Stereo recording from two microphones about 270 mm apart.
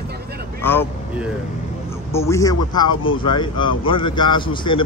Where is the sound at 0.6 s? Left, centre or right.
Centre.